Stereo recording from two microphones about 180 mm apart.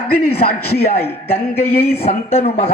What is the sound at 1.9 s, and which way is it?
Speech, 35° left (ahead or behind).